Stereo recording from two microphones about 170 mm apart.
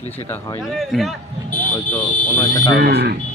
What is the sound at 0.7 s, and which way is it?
Speech, centre (ahead or behind).